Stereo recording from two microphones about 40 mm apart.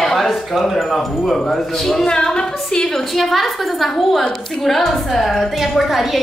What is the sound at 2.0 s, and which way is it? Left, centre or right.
Speech, centre.